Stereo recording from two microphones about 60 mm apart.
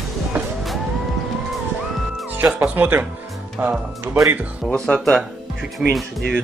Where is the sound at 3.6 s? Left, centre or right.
Right.